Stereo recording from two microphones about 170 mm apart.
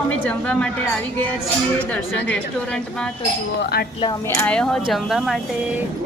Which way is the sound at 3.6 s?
65° left (ahead or behind).